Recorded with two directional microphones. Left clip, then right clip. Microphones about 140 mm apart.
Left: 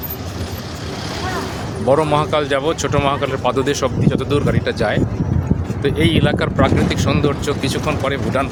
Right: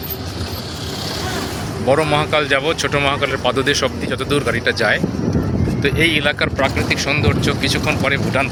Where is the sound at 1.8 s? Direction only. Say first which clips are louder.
Left 1 dB; 20° left (ahead or behind).